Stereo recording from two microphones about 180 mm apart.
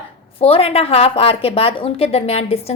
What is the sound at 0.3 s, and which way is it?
A woman's voice, 30° left (ahead or behind).